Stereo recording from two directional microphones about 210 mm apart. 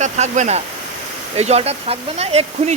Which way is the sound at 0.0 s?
35° right (ahead or behind).